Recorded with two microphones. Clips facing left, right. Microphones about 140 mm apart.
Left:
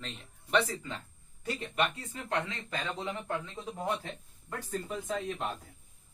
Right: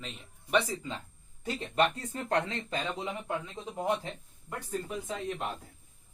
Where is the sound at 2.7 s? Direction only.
15° right (ahead or behind).